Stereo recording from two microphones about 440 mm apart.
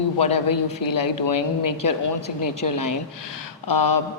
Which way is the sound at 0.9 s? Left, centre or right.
Left.